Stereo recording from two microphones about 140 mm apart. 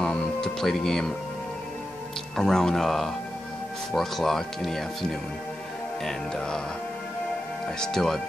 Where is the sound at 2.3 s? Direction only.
5° left (ahead or behind).